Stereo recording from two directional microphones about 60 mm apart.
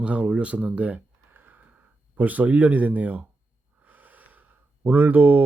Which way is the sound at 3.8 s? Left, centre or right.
Right.